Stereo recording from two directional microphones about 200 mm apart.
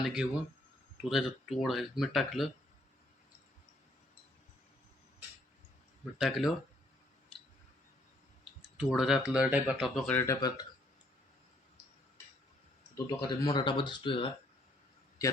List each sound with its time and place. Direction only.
0.0 s speech: 5° right (ahead or behind)
6.1 s speech: centre (ahead or behind)
8.8 s speech: centre (ahead or behind); by 10.7 s 15° left (ahead or behind)
13.1 s speech: 20° left (ahead or behind)